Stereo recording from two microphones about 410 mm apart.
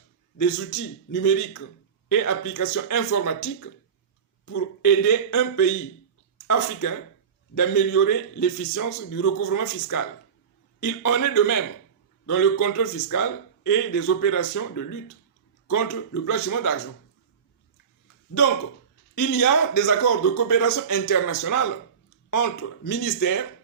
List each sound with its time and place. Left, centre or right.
0.3 s a man's voice: left
7.5 s a man's voice: left
19.1 s a man's voice: left